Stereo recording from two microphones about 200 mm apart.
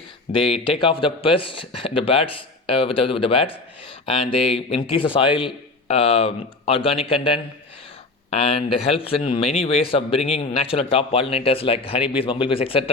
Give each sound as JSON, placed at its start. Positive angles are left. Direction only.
{"t": 0.3, "sound": "speech", "side_deg": 25}